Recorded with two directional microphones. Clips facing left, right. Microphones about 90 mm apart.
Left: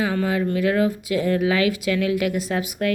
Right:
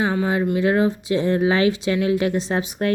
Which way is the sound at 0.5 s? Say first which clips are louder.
Right 2 dB; 25° right (ahead or behind).